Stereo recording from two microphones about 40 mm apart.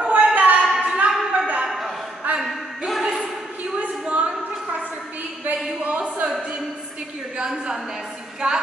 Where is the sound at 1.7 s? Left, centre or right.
Centre.